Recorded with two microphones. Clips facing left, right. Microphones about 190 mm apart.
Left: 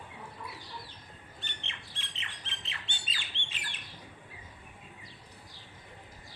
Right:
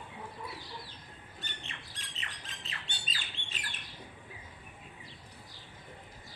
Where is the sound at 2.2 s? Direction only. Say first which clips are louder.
Right 1 dB; 40° right (ahead or behind).